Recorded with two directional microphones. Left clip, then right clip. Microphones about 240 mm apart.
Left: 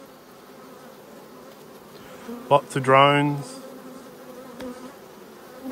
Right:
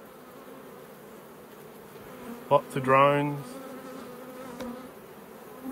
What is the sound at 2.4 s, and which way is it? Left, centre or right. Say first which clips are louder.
Speech: left 4 dB; left.